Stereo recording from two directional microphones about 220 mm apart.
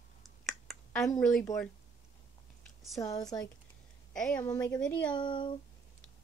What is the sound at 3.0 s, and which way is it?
Speech, 15° left (ahead or behind).